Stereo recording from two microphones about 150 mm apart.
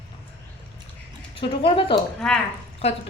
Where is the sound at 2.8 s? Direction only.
40° left (ahead or behind).